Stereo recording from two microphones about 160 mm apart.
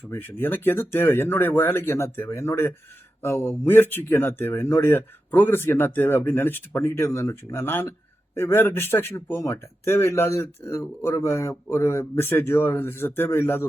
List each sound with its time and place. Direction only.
0.1 s speech: 15° left (ahead or behind)